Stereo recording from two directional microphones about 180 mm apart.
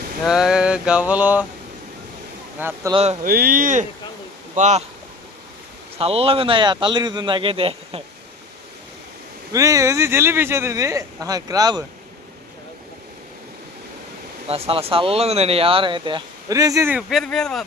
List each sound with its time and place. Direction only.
0.3 s mantra: 5° right (ahead or behind)
2.6 s speech: 10° right (ahead or behind)
2.9 s speech: 35° right (ahead or behind)
3.2 s speech: 50° right (ahead or behind)
6.0 s speech: 35° right (ahead or behind)
9.5 s speech: 20° right (ahead or behind)
14.4 s speech: 35° right (ahead or behind); by 17.0 s 15° right (ahead or behind)
17.1 s mantra: centre (ahead or behind)